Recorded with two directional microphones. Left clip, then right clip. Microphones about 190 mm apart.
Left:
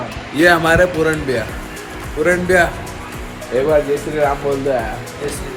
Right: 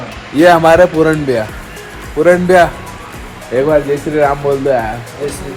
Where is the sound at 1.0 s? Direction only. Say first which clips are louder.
Right 5 dB; 20° right (ahead or behind).